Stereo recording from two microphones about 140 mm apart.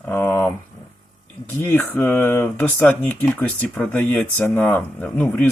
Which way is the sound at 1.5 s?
15° left (ahead or behind).